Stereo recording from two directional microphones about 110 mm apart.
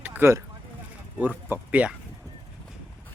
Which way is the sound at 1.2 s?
15° right (ahead or behind).